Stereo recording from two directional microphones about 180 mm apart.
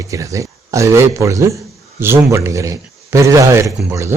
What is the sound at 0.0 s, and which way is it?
A man's voice, 15° right (ahead or behind).